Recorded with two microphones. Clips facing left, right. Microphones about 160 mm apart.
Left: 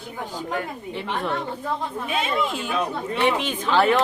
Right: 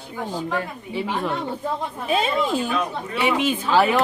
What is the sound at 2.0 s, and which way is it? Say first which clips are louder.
Speech: right 4 dB; 35° right (ahead or behind).